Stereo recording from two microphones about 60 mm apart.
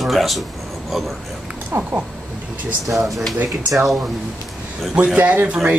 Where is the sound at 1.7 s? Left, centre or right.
Right.